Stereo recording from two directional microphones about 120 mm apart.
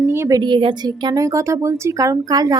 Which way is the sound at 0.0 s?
20° right (ahead or behind).